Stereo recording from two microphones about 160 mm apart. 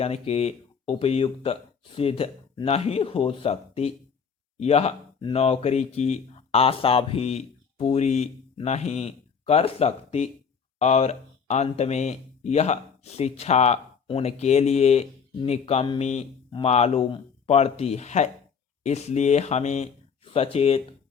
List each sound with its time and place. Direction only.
0.0 s speech: 40° left (ahead or behind)